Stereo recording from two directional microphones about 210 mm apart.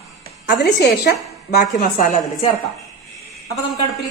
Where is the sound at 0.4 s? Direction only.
50° left (ahead or behind).